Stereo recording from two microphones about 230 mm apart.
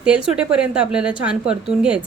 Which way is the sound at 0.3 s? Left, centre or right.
Centre.